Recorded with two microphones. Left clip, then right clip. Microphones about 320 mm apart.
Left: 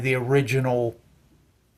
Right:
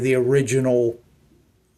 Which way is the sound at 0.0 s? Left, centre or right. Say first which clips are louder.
Right 4 dB; left.